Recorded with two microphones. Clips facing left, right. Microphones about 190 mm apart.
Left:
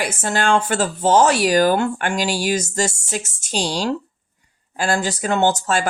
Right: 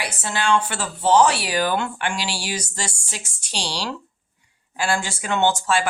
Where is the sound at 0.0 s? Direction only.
45° left (ahead or behind).